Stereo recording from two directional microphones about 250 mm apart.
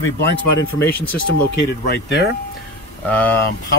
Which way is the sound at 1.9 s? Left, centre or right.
Left.